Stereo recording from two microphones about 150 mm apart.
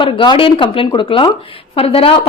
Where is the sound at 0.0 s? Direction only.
35° left (ahead or behind).